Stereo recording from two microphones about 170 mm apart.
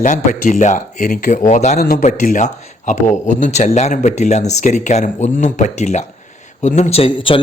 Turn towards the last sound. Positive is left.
turn(degrees=35)  # may be behind; listen again after turning